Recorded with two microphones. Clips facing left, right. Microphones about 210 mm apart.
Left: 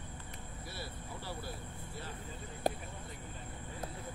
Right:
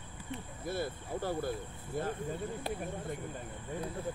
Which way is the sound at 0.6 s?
50° right (ahead or behind).